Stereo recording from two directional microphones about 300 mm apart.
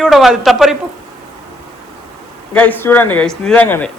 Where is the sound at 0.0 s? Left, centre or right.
Centre.